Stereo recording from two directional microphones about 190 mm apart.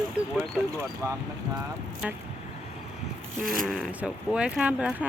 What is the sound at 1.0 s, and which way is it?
Speech, 15° right (ahead or behind).